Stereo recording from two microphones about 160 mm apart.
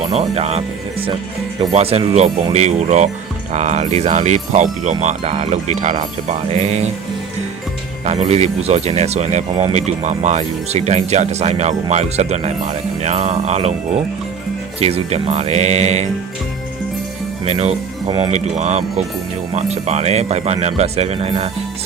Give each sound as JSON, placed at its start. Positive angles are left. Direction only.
{"t": 0.0, "sound": "speech", "side_deg": -40}
{"t": 8.0, "sound": "speech", "side_deg": -40}
{"t": 14.8, "sound": "speech", "side_deg": -40}
{"t": 17.4, "sound": "speech", "side_deg": -40}